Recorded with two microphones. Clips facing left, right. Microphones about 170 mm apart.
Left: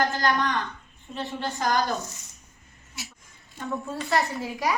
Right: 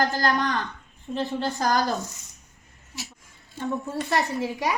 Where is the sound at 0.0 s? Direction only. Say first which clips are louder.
Right 1 dB; 40° right (ahead or behind).